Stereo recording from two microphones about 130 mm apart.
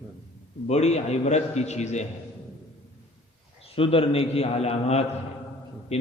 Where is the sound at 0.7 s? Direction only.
55° left (ahead or behind).